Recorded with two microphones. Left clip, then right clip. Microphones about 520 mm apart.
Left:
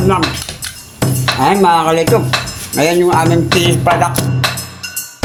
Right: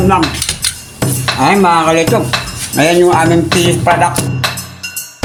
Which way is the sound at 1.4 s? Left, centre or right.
Left.